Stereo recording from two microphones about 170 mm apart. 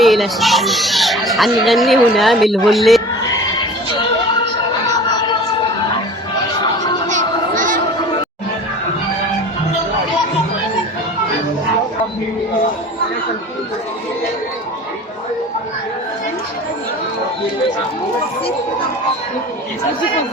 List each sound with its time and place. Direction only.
0.0 s speech: centre (ahead or behind)
5.1 s music: 25° left (ahead or behind)
7.1 s a sound: 50° right (ahead or behind)